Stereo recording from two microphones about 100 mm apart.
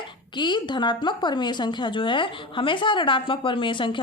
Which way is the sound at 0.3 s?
50° left (ahead or behind).